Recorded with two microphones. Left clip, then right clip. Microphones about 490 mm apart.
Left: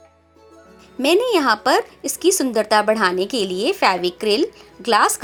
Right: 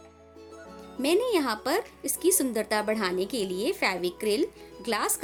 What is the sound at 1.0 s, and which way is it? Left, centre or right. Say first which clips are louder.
A woman's voice: left 9 dB; right.